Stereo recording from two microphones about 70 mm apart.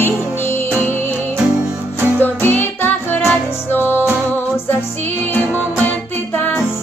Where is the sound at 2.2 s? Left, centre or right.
Left.